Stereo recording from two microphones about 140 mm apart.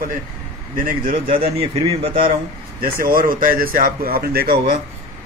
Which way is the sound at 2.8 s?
90° right.